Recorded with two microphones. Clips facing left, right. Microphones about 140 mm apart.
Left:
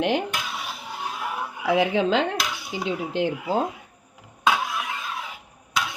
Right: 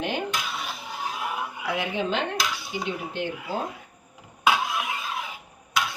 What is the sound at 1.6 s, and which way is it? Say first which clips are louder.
Dishes: left 8 dB; 90° left.